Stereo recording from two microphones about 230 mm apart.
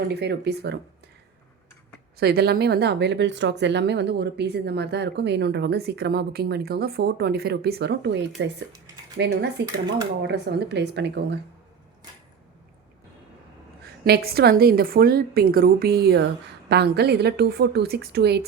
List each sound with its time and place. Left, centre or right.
0.1 s speech: right
2.1 s speech: right
14.0 s speech: right